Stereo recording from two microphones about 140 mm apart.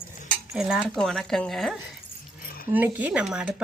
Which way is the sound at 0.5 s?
5° right (ahead or behind).